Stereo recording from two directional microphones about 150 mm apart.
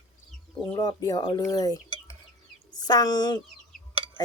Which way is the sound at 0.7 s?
25° left (ahead or behind).